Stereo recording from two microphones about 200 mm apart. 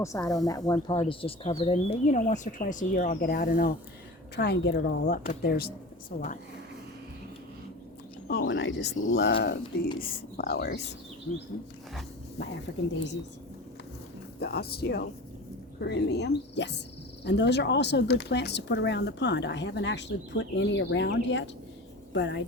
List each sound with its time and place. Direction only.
0.0 s speech: 15° left (ahead or behind); by 6.3 s 45° left (ahead or behind)
8.3 s speech: 60° left (ahead or behind)
14.3 s a woman's voice: 50° left (ahead or behind)